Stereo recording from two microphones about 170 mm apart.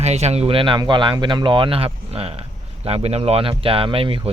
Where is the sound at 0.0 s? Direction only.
40° right (ahead or behind).